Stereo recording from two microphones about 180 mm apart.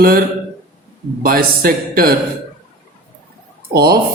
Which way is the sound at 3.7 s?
60° right (ahead or behind).